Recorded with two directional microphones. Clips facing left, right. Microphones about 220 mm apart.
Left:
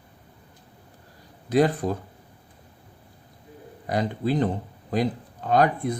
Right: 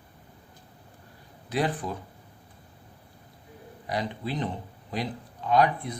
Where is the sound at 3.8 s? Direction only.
45° left (ahead or behind).